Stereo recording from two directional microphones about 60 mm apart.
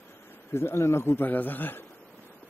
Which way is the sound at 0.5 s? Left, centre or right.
Left.